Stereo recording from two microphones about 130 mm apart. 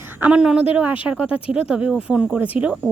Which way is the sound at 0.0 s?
15° right (ahead or behind).